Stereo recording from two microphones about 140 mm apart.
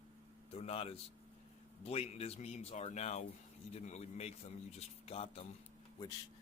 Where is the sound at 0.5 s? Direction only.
45° left (ahead or behind).